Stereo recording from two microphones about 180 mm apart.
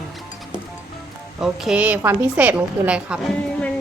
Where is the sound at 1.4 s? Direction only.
5° right (ahead or behind).